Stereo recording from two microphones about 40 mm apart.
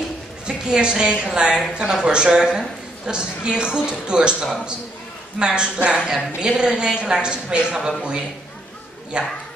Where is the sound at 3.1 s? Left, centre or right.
Right.